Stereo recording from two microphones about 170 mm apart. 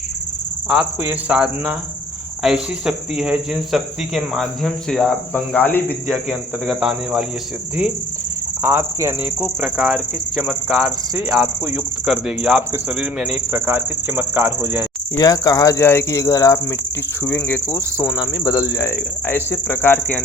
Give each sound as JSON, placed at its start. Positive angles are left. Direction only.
{"t": 0.7, "sound": "speech", "side_deg": -5}
{"t": 6.2, "sound": "speech", "side_deg": -5}
{"t": 8.6, "sound": "speech", "side_deg": -15}
{"t": 9.6, "sound": "speech", "side_deg": 0}
{"t": 15.1, "sound": "speech", "side_deg": 20}